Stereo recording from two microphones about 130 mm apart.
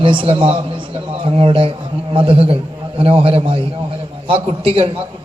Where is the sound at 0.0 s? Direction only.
40° right (ahead or behind).